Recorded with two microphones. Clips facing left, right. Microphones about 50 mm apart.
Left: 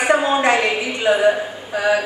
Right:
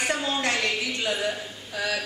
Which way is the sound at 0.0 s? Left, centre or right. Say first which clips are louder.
Left 10 dB; left.